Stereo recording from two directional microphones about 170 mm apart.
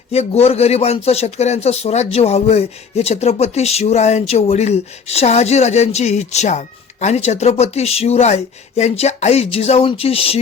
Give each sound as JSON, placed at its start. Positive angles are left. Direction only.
{"t": 0.1, "sound": "speech", "side_deg": 40}